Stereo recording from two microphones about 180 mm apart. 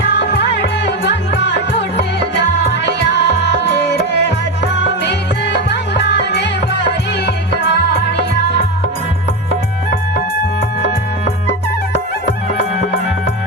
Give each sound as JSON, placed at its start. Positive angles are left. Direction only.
{"t": 0.0, "sound": "music", "side_deg": 70}